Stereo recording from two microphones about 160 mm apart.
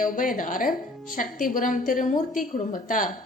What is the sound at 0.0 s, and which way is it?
A woman's voice, 60° left (ahead or behind).